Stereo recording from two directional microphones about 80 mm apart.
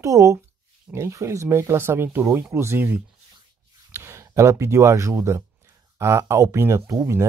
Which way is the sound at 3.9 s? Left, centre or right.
Right.